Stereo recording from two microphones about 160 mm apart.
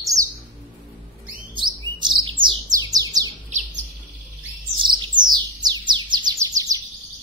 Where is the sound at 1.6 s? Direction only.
30° right (ahead or behind).